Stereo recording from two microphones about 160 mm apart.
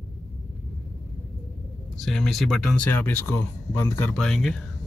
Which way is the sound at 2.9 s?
10° left (ahead or behind).